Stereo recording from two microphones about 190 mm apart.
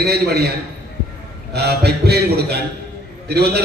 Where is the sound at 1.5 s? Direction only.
60° right (ahead or behind).